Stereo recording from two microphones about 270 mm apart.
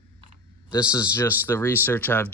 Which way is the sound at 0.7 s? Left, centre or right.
Centre.